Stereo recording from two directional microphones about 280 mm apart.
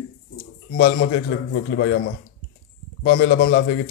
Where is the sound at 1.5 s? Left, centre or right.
Left.